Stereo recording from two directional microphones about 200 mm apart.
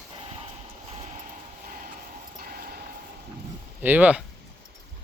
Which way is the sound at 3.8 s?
10° right (ahead or behind).